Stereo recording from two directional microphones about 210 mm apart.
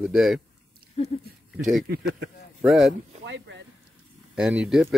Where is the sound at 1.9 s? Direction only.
50° right (ahead or behind).